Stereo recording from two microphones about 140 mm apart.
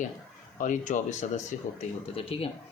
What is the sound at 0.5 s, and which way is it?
Speech, 65° left (ahead or behind).